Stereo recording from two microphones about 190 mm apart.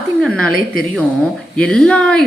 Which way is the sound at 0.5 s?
50° left (ahead or behind).